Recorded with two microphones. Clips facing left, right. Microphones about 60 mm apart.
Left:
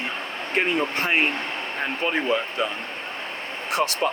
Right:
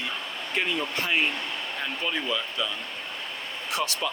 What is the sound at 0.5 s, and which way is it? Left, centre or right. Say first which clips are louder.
Speech: left 5 dB; left.